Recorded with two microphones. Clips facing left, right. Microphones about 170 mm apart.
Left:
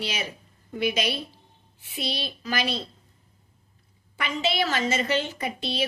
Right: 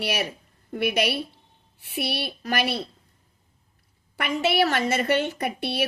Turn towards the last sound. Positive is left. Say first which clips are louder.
# right 2 dB
turn(degrees=-65)  # may be behind; listen again after turning